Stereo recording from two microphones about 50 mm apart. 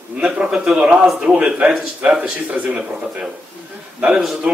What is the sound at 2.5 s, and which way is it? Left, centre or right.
Speech, right.